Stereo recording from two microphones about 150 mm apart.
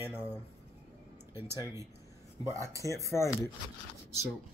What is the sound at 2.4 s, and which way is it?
Speech, 20° right (ahead or behind).